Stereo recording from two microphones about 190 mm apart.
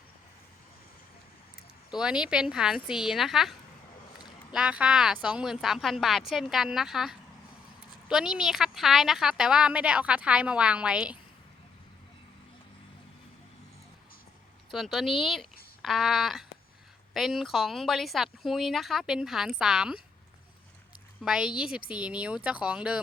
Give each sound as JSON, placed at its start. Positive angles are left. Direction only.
{"t": 1.9, "sound": "a woman's voice", "side_deg": -5}
{"t": 4.5, "sound": "a woman's voice", "side_deg": -5}
{"t": 14.7, "sound": "a woman's voice", "side_deg": 0}
{"t": 21.2, "sound": "a woman's voice", "side_deg": -5}